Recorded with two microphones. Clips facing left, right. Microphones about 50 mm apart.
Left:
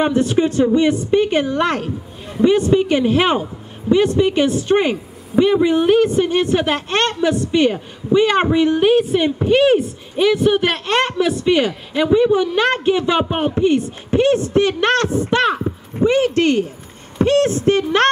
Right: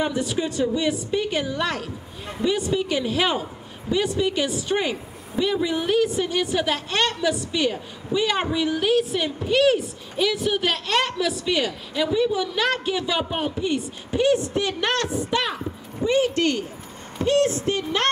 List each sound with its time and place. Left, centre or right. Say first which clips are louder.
0.0 s a woman's voice: left 8 dB; left